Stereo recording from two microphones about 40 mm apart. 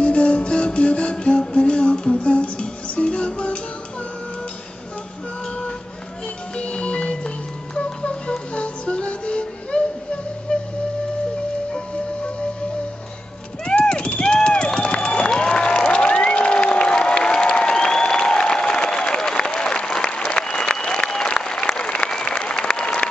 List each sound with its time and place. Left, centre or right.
0.0 s music: left
6.5 s music: left
13.7 s a sound: left
21.1 s applause: centre